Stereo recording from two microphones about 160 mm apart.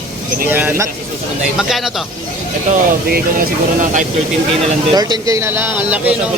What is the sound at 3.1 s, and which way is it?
Speech, 55° right (ahead or behind).